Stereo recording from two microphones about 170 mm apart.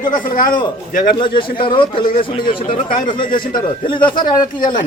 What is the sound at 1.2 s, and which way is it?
Speech, 30° left (ahead or behind).